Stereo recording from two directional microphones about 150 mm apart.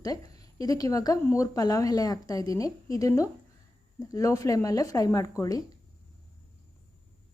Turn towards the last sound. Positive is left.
turn(degrees=25)  # may be behind; listen again after turning